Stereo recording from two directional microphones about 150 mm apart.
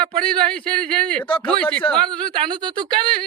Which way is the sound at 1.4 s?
10° left (ahead or behind).